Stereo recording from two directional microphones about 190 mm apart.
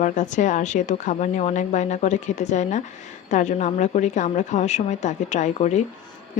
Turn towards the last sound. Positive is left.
turn(degrees=40)  # may be behind; listen again after turning